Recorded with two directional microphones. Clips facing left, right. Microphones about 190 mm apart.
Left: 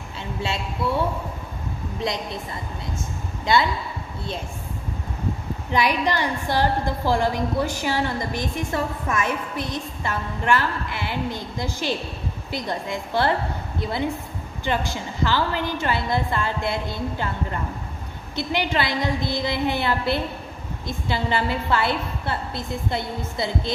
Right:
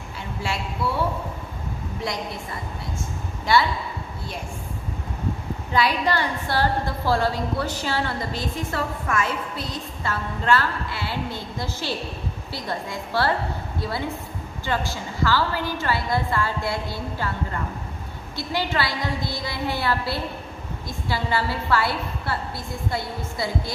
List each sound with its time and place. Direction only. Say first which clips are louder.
3.5 s a woman's voice: even; 20° left (ahead or behind)
5.7 s a woman's voice: even; 15° left (ahead or behind)